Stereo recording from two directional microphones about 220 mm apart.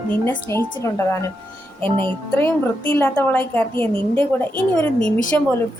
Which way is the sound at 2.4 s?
10° left (ahead or behind).